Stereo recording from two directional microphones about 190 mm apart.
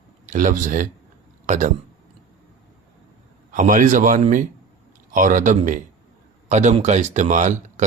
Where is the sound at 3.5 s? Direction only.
45° right (ahead or behind).